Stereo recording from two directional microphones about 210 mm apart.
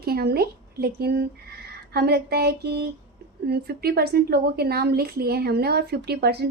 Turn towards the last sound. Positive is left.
turn(degrees=-50)  # may be behind; listen again after turning